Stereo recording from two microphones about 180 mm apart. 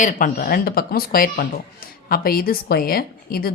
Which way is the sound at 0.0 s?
50° left (ahead or behind).